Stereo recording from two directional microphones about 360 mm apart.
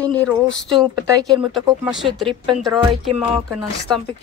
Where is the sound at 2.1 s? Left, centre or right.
Centre.